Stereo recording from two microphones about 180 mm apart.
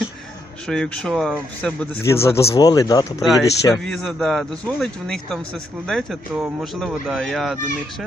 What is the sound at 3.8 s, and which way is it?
A man's voice, centre (ahead or behind).